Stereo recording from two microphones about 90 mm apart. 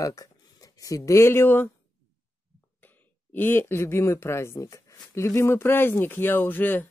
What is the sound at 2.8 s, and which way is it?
Speech, 20° left (ahead or behind).